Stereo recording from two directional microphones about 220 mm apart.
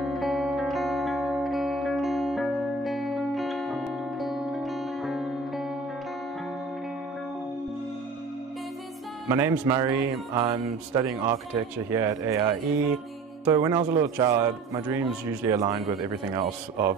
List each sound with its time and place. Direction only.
0.1 s music: centre (ahead or behind)
9.3 s a man's voice: 10° right (ahead or behind)